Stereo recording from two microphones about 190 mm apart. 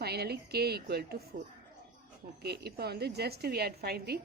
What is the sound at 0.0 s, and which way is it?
Speech, 55° right (ahead or behind).